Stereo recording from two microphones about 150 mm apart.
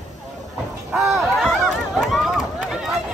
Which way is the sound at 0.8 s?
Centre (ahead or behind).